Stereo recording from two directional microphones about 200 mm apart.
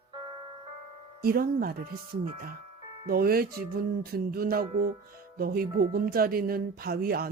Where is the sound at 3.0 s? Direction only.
50° right (ahead or behind).